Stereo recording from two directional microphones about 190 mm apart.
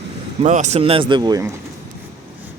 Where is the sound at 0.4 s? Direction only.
40° right (ahead or behind); by 1.5 s 20° right (ahead or behind).